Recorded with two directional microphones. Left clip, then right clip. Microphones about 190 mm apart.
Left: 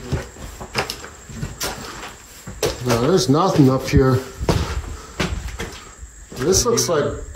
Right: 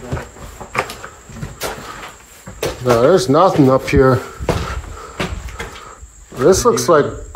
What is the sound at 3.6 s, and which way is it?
Speech, 15° left (ahead or behind).